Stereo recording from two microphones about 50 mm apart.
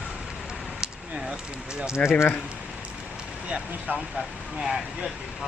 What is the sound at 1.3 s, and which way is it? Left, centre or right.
Speech, centre.